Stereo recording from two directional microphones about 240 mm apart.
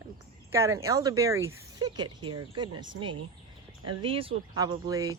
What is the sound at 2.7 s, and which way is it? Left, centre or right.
Speech, right.